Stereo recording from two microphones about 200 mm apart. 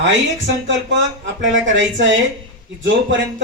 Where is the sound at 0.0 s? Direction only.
65° right (ahead or behind).